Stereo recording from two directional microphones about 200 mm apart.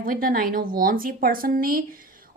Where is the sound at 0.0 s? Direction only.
45° right (ahead or behind).